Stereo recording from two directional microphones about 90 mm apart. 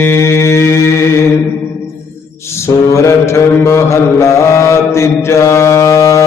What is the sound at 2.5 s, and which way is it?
Mantra, 30° left (ahead or behind).